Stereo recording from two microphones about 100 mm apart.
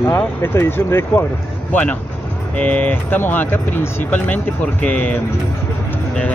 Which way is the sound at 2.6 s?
15° left (ahead or behind).